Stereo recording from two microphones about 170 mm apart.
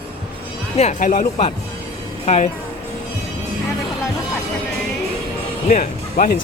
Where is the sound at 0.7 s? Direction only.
45° left (ahead or behind).